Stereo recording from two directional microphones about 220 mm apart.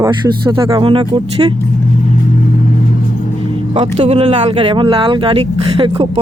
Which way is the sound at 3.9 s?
30° right (ahead or behind).